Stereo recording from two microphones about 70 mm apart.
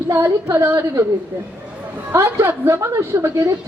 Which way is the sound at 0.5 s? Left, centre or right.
Right.